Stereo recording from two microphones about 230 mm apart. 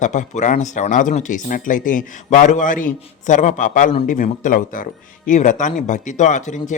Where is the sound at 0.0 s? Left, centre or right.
Left.